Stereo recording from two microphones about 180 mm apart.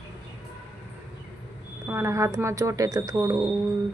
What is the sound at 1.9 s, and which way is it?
Speech, 15° right (ahead or behind).